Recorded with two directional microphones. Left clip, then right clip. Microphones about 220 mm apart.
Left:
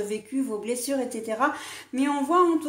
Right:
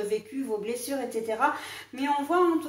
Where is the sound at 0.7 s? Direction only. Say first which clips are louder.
Left 3 dB; 45° left (ahead or behind).